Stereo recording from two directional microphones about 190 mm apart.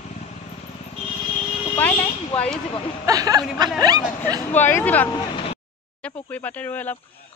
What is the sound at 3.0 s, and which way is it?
Speech, 20° right (ahead or behind).